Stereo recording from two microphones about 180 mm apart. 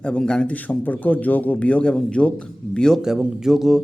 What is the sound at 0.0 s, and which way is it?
A man's voice, 5° left (ahead or behind).